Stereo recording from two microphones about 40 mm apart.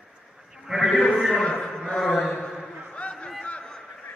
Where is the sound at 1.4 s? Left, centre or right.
Left.